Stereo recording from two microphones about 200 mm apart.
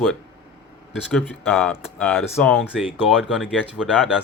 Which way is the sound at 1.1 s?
Centre (ahead or behind).